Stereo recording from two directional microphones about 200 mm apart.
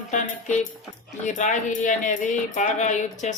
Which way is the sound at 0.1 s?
40° left (ahead or behind).